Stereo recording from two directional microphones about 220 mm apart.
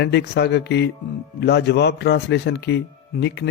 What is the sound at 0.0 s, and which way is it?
Speech, 50° left (ahead or behind).